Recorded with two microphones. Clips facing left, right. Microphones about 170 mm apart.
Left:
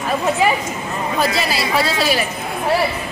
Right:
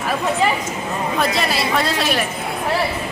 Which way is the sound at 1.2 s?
Centre (ahead or behind).